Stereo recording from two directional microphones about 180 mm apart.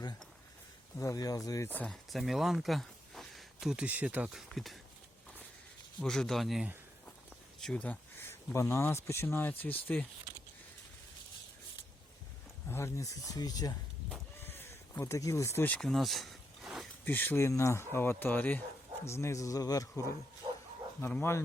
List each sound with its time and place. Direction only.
0.9 s speech: 15° left (ahead or behind)
1.8 s speech: centre (ahead or behind)
6.0 s speech: 5° left (ahead or behind)
12.6 s speech: 15° left (ahead or behind)
14.1 s a sound: 10° left (ahead or behind)
17.1 s speech: 10° left (ahead or behind)
20.4 s bow-wow: 25° right (ahead or behind)
21.0 s speech: 10° left (ahead or behind)